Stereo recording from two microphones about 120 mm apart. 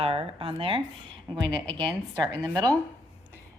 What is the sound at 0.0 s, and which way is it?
Speech, 55° right (ahead or behind).